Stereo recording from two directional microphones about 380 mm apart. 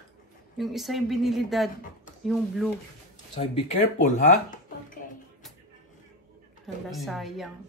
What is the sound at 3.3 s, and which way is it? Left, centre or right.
Speech, centre.